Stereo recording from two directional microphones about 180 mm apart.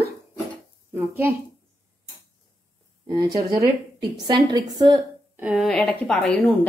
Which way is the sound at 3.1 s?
20° right (ahead or behind).